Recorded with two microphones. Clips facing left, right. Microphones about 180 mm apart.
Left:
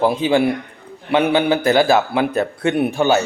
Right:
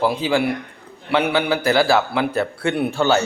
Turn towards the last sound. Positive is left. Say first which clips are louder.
# left 2 dB
turn(degrees=15)  # may be behind; listen again after turning